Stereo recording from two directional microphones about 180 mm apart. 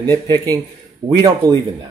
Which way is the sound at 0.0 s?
20° right (ahead or behind).